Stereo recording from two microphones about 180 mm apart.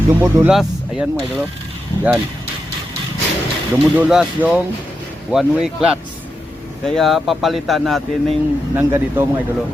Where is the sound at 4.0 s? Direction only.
5° right (ahead or behind).